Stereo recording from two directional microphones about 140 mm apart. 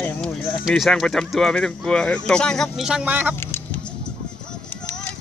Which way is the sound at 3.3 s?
15° left (ahead or behind).